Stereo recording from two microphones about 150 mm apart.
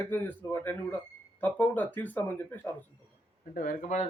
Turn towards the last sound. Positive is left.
turn(degrees=60)  # may be behind; listen again after turning